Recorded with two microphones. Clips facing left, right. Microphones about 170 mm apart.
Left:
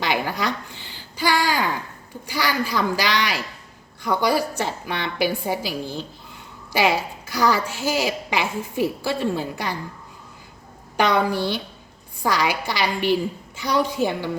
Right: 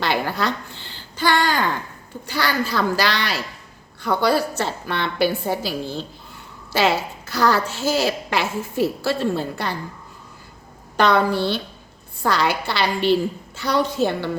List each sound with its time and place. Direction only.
0.0 s a sound: 10° left (ahead or behind)
2.2 s a woman's voice: 10° left (ahead or behind)
10.9 s a woman's voice: 10° left (ahead or behind)